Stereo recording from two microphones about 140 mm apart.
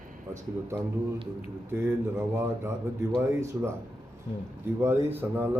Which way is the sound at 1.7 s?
20° right (ahead or behind).